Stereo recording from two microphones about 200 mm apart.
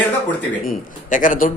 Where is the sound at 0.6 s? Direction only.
40° left (ahead or behind).